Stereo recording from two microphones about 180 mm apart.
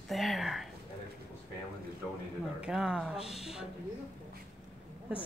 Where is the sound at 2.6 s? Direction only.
5° right (ahead or behind).